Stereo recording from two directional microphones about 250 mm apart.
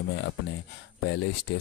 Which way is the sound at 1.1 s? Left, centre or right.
Left.